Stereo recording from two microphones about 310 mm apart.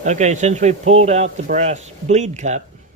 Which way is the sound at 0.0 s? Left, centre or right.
Right.